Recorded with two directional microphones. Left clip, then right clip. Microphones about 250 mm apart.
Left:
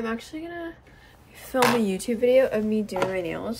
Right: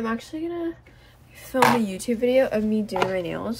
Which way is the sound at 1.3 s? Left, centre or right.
Centre.